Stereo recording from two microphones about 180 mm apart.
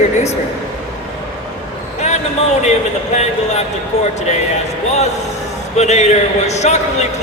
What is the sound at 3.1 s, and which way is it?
Speech, 40° left (ahead or behind).